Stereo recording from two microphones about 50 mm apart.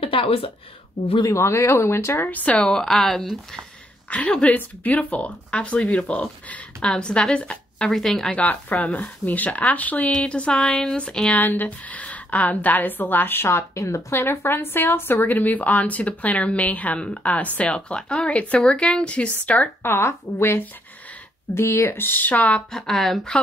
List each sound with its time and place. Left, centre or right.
1.3 s speech: left
2.2 s a woman's voice: left
2.5 s speech: centre
4.1 s a woman's voice: left
7.9 s speech: centre
8.3 s a woman's voice: left; by 11.2 s centre
11.2 s a woman's voice: left
13.5 s speech: left
14.1 s a woman's voice: left
19.8 s speech: left
21.9 s a woman's voice: left
22.7 s speech: centre